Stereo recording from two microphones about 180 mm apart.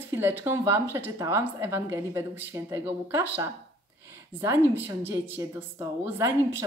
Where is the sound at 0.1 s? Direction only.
10° right (ahead or behind).